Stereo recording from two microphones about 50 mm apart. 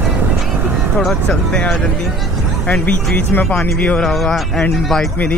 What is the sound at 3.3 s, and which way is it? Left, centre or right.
Speech, left.